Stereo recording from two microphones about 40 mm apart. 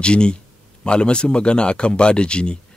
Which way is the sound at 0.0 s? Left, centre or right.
Left.